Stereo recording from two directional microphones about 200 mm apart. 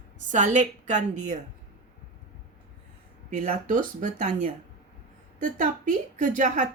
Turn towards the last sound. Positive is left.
turn(degrees=-40)  # may be behind; listen again after turning